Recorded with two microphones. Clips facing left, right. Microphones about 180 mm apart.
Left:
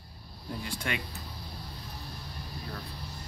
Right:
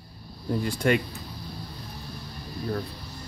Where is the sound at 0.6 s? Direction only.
45° right (ahead or behind).